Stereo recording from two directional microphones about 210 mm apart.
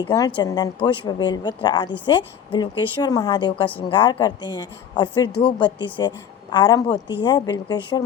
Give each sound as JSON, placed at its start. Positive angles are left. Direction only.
{"t": 0.0, "sound": "a woman's voice", "side_deg": 15}